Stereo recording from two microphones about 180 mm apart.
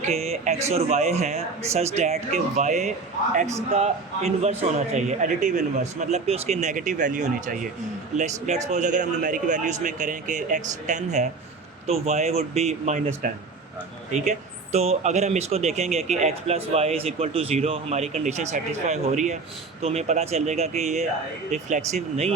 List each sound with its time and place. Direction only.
0.1 s a man's voice: 35° right (ahead or behind)